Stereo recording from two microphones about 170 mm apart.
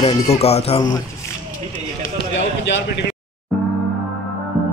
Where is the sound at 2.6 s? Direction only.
90° left.